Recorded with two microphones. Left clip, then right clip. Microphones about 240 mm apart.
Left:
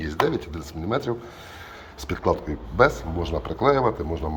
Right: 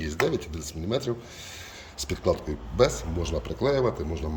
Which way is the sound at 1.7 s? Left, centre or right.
Centre.